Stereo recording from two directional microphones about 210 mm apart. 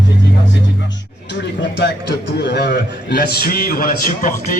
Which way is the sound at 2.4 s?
55° left (ahead or behind).